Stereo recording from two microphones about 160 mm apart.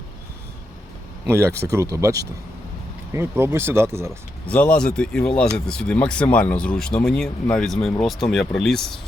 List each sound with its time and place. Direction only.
1.3 s speech: 15° right (ahead or behind)
4.4 s speech: 10° left (ahead or behind)